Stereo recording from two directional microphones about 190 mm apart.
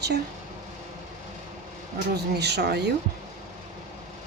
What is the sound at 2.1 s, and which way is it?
Speech, 60° right (ahead or behind).